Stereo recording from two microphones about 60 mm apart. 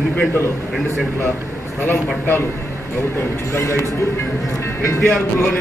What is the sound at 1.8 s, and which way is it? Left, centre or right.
Speech, left.